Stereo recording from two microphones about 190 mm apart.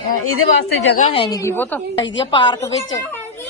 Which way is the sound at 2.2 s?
25° left (ahead or behind).